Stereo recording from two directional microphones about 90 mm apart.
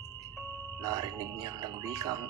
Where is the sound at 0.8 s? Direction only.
45° right (ahead or behind).